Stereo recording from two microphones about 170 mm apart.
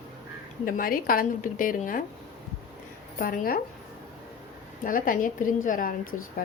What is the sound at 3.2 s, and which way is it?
Speech, 55° left (ahead or behind).